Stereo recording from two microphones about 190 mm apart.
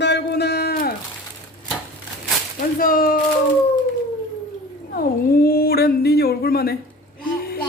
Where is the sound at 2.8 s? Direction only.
50° left (ahead or behind).